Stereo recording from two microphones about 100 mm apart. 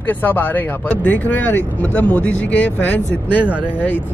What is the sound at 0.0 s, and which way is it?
Speech, 20° left (ahead or behind).